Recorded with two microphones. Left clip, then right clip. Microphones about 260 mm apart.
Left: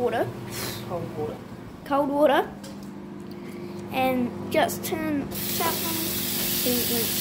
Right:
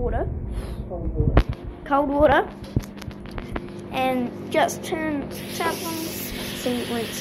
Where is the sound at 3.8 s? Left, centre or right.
Centre.